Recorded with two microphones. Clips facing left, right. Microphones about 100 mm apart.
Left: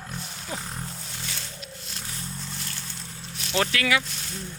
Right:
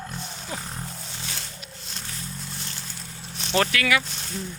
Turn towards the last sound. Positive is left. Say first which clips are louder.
# right 1 dB
turn(degrees=25)  # may be behind; listen again after turning